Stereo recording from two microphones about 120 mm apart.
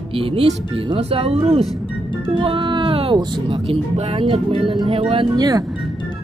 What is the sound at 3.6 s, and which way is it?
Speech, 60° right (ahead or behind).